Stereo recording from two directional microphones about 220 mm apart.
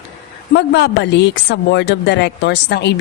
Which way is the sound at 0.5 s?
50° left (ahead or behind).